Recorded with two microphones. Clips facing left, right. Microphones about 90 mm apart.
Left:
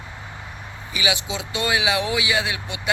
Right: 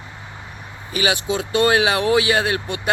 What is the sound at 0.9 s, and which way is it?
Speech, 50° right (ahead or behind).